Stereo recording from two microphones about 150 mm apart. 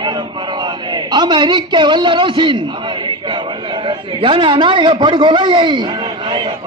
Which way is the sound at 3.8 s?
35° right (ahead or behind).